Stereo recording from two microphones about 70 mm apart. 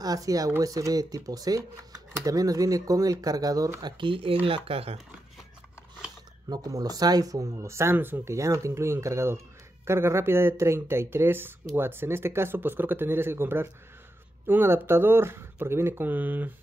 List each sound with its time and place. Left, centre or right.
0.0 s speech: right
6.5 s speech: right
8.3 s speech: right